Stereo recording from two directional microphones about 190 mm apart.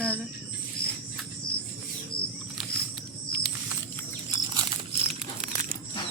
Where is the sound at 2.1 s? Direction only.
50° left (ahead or behind).